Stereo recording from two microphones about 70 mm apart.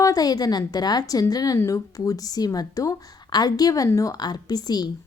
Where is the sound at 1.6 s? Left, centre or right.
Left.